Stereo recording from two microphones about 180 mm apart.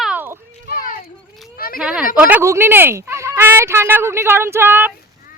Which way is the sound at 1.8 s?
5° right (ahead or behind).